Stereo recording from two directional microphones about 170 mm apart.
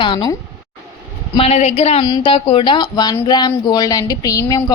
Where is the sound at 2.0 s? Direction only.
25° left (ahead or behind).